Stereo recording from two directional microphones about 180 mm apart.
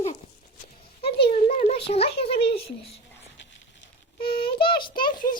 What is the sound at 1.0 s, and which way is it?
A child's voice, 30° left (ahead or behind).